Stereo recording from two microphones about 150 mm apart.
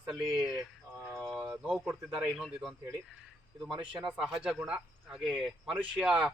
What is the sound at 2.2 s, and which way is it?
Speech, centre (ahead or behind).